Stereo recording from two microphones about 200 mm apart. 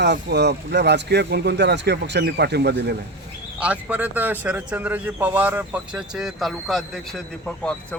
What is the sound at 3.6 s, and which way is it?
A man's voice, 5° right (ahead or behind).